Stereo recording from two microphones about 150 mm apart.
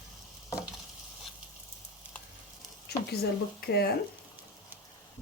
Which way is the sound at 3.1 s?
90° left.